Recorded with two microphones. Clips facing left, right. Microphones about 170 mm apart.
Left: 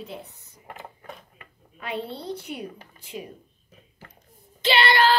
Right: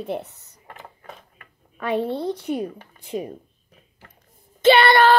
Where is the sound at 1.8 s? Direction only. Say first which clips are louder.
Right 9 dB; 50° right (ahead or behind).